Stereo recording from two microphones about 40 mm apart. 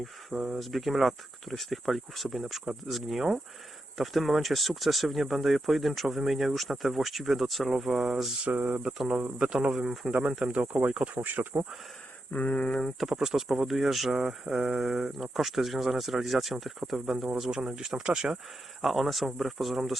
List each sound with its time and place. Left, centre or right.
0.5 s speech: centre
8.4 s speech: right
8.8 s speech: centre
9.4 s insect: right
9.7 s speech: centre
10.1 s insect: right
10.8 s speech: right
12.3 s a sound: left
12.5 s speech: left
13.0 s speech: centre
14.1 s speech: centre
17.5 s speech: centre
18.8 s speech: centre